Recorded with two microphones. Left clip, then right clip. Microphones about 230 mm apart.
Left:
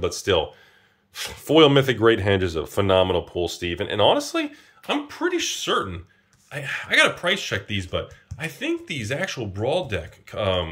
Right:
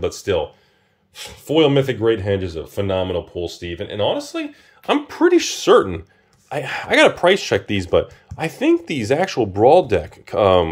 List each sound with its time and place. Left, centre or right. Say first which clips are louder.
0.0 s speech: right 1 dB; centre
4.8 s speech: right 8 dB; centre